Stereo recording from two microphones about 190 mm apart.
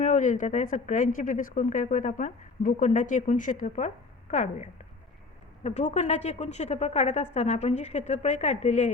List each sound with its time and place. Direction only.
0.0 s a woman's voice: 40° left (ahead or behind)